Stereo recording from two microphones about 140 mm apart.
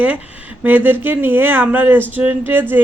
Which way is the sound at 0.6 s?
15° right (ahead or behind).